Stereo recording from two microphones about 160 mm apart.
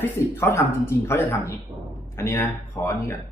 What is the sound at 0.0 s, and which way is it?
Speech, 15° left (ahead or behind).